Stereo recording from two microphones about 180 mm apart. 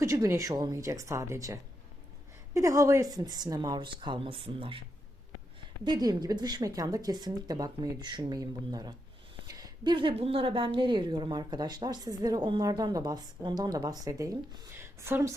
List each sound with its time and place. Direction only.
0.0 s a woman's voice: 15° right (ahead or behind)
5.8 s a woman's voice: 20° right (ahead or behind)